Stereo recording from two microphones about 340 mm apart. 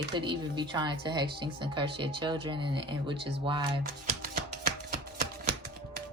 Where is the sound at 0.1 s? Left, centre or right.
Centre.